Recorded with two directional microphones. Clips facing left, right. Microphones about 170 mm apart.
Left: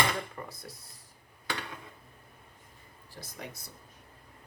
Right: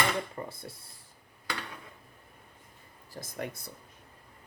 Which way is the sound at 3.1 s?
50° right (ahead or behind).